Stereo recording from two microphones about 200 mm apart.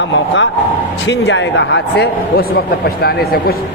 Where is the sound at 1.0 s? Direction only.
60° left (ahead or behind).